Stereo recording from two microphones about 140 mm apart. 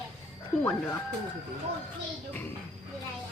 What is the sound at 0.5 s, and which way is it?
Speech, 10° left (ahead or behind).